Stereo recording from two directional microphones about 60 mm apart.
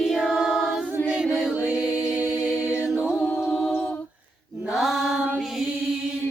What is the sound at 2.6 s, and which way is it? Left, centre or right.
A capella, right.